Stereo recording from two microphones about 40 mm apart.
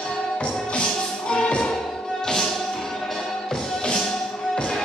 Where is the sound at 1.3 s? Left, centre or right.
Left.